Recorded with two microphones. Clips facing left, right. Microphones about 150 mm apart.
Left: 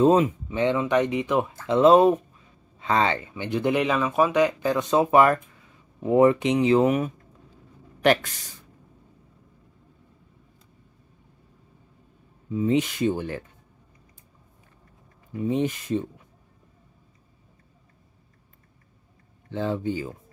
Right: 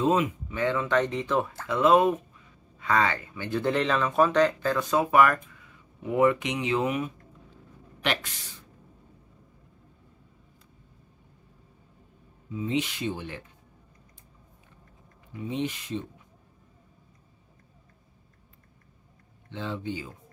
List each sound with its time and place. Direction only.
0.0 s speech: 35° left (ahead or behind); by 1.5 s 15° left (ahead or behind)
1.7 s speech: 30° left (ahead or behind); by 8.5 s 45° left (ahead or behind)
12.5 s speech: 45° left (ahead or behind)
15.3 s speech: 45° left (ahead or behind)
19.5 s speech: 45° left (ahead or behind)